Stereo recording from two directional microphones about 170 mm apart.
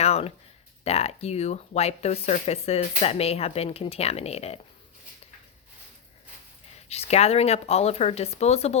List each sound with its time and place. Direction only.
0.0 s a sound: 35° left (ahead or behind)
0.9 s speech: 40° left (ahead or behind)
6.7 s speech: 40° left (ahead or behind)